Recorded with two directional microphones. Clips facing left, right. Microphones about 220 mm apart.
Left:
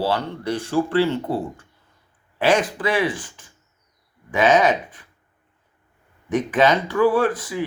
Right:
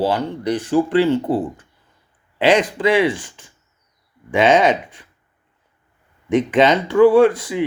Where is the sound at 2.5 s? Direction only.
20° right (ahead or behind).